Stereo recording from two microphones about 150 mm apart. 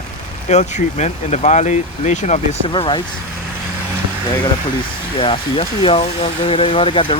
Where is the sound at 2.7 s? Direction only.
35° left (ahead or behind).